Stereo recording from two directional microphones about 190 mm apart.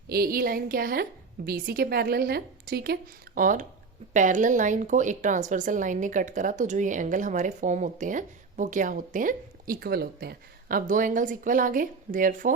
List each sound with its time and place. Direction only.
0.1 s a woman's voice: 50° right (ahead or behind)